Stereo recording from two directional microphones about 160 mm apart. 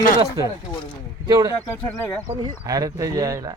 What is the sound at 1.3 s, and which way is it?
Speech, 25° right (ahead or behind).